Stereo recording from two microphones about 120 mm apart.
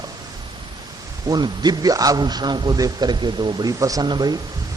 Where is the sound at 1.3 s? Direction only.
35° right (ahead or behind).